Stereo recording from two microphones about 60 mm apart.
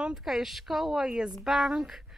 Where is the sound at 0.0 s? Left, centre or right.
Centre.